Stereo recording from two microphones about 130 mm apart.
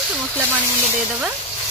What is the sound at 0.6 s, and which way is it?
Speech, 30° left (ahead or behind).